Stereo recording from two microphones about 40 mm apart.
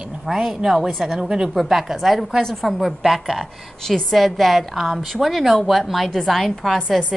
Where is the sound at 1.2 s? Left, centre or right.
Centre.